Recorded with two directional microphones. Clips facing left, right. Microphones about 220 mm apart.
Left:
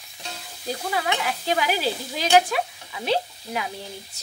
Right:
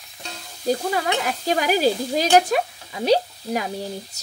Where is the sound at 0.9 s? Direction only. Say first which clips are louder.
Right 3 dB; 45° right (ahead or behind).